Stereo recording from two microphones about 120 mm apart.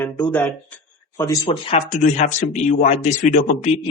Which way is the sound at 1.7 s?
80° left.